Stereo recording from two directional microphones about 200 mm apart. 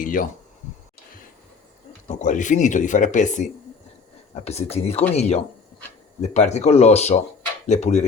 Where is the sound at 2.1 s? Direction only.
40° left (ahead or behind).